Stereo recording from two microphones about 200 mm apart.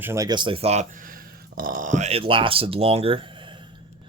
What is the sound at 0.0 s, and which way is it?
Speech, 15° right (ahead or behind).